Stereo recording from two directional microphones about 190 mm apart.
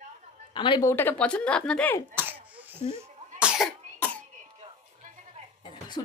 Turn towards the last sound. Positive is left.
turn(degrees=-35)  # may be behind; listen again after turning